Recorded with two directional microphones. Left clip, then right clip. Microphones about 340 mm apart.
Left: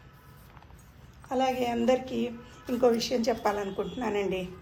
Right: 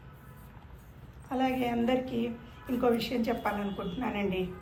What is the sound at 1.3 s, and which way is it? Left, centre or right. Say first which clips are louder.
A woman's voice: left 3 dB; centre.